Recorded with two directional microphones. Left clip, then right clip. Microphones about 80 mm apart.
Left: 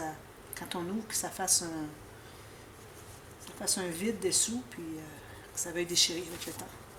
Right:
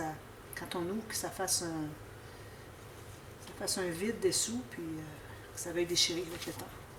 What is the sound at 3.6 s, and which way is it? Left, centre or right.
Speech, left.